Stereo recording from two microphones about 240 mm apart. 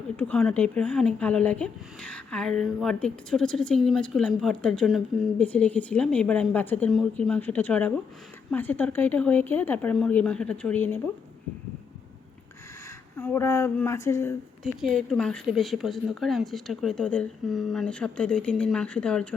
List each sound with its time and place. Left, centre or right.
0.2 s a woman's voice: centre
13.1 s a woman's voice: centre